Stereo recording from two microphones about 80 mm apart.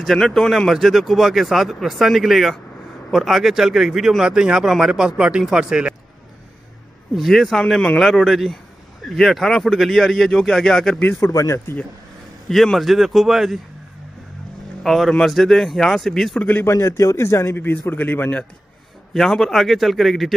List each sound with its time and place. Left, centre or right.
0.0 s speech: centre
7.2 s speech: centre
11.3 s speech: left
12.4 s speech: centre
14.8 s speech: centre
16.3 s speech: centre
16.6 s a man's voice: left
19.1 s speech: centre